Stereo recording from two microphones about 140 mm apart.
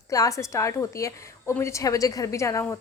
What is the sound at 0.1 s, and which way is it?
A woman's voice, 25° left (ahead or behind).